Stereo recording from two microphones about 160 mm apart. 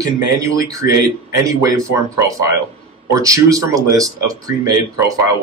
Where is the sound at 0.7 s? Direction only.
20° right (ahead or behind).